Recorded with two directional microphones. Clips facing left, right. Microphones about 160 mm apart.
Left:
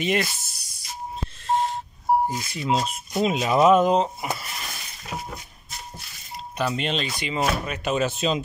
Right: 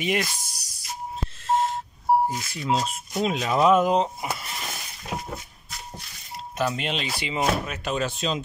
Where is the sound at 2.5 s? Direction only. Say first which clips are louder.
Left 2 dB; 5° left (ahead or behind).